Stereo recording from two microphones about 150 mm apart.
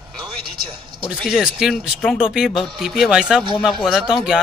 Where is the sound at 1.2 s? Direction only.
5° right (ahead or behind).